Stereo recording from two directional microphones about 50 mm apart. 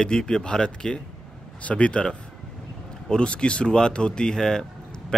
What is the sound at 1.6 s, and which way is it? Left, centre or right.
Speech, left.